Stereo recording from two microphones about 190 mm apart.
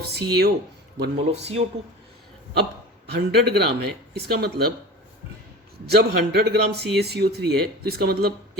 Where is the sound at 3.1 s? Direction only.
60° right (ahead or behind).